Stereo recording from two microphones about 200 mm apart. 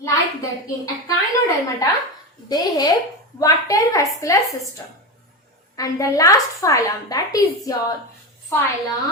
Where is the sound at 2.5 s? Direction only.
20° left (ahead or behind).